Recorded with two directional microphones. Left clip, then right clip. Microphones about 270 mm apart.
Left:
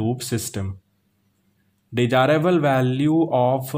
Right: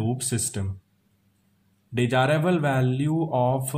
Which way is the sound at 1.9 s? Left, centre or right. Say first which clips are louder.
Left 5 dB; left.